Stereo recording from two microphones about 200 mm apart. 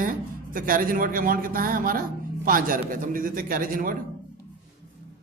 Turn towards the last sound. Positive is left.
turn(degrees=-45)  # may be behind; listen again after turning